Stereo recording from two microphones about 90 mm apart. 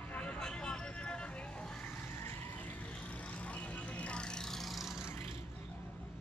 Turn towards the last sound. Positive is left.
turn(degrees=30)  # may be behind; listen again after turning